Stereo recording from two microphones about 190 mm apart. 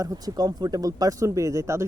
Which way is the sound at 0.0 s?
20° right (ahead or behind).